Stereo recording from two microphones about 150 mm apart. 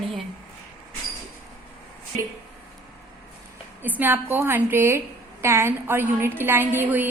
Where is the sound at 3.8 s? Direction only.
10° right (ahead or behind).